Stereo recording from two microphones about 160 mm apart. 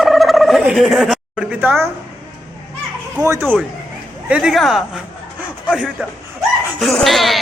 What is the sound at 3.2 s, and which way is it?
Speech, 15° right (ahead or behind).